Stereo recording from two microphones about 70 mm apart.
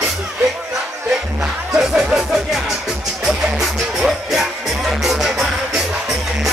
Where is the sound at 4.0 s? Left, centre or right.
Centre.